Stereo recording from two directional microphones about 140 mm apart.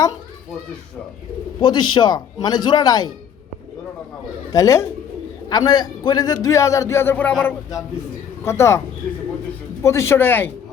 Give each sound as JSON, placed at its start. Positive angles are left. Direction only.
{"t": 1.6, "sound": "a man's voice", "side_deg": 30}
{"t": 4.5, "sound": "a man's voice", "side_deg": 20}
{"t": 9.8, "sound": "speech", "side_deg": 20}